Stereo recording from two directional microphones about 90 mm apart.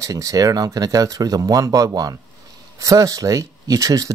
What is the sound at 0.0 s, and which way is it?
Speech, 40° right (ahead or behind).